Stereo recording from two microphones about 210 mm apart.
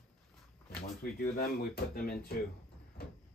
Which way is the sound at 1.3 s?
45° left (ahead or behind).